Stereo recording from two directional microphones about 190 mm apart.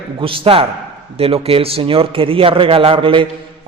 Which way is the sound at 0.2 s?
30° right (ahead or behind).